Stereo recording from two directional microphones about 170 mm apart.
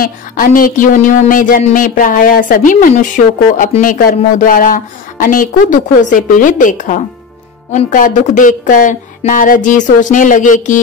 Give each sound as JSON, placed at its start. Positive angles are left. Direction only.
{"t": 0.0, "sound": "speech", "side_deg": 55}